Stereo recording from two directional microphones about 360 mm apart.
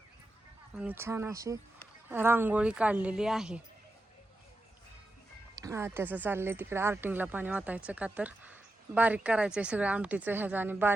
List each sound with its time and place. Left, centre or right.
0.8 s a woman's voice: centre
5.5 s a woman's voice: centre